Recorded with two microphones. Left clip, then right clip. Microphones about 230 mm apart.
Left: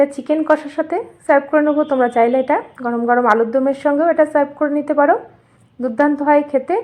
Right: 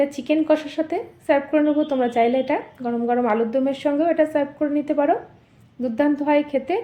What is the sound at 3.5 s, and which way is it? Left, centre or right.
A woman's voice, centre.